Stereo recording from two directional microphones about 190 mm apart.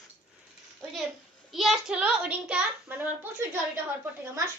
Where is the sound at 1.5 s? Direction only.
Centre (ahead or behind).